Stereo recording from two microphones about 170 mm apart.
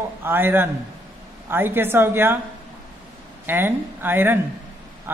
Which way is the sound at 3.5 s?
10° right (ahead or behind).